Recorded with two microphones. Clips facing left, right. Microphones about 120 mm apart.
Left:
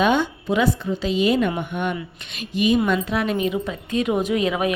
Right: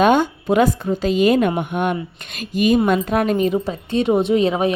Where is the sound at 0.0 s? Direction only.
50° right (ahead or behind).